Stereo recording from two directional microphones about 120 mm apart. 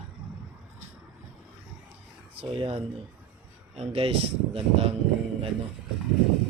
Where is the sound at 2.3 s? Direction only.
55° right (ahead or behind).